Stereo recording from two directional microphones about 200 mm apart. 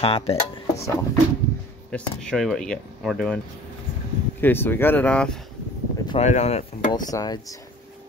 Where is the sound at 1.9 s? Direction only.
5° left (ahead or behind).